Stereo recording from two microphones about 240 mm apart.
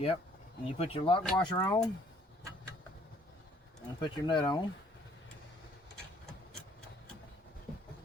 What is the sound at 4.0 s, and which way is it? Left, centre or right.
Speech, centre.